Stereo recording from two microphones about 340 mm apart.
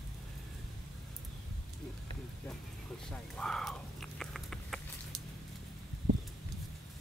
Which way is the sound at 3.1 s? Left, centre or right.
Centre.